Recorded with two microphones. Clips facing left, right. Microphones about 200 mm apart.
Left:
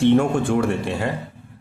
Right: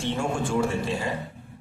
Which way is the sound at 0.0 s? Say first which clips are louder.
Left 11 dB; 60° left (ahead or behind).